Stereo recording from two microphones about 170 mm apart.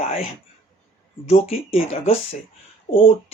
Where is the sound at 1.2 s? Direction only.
35° left (ahead or behind).